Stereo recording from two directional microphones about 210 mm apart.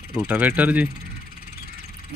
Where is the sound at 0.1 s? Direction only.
5° right (ahead or behind).